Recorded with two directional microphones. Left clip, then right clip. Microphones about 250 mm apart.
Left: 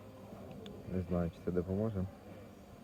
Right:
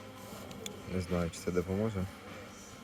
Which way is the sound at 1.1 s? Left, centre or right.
Centre.